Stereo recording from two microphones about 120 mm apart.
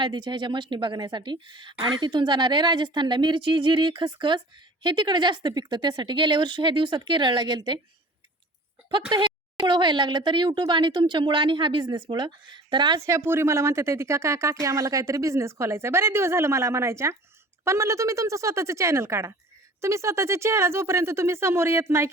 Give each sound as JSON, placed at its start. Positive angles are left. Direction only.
{"t": 0.0, "sound": "speech", "side_deg": -40}
{"t": 8.9, "sound": "speech", "side_deg": -40}
{"t": 13.0, "sound": "a woman's voice", "side_deg": -25}